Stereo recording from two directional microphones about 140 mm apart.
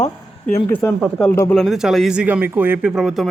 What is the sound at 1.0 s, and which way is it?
Speech, 5° left (ahead or behind).